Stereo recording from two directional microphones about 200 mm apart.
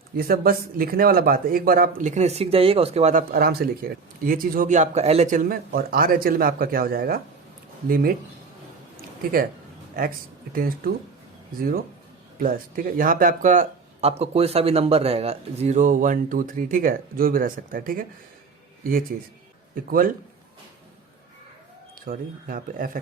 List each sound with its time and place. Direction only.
0.2 s speech: 50° right (ahead or behind)
10.0 s speech: 40° right (ahead or behind)
12.4 s a man's voice: 45° right (ahead or behind)
22.0 s speech: 45° right (ahead or behind)